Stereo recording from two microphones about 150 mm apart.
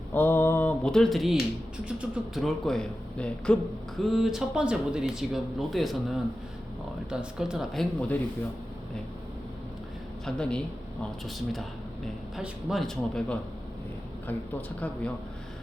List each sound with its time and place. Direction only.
0.1 s mantra: 15° left (ahead or behind)
1.8 s speech: 5° right (ahead or behind)
10.2 s speech: 5° left (ahead or behind)
12.4 s speech: centre (ahead or behind)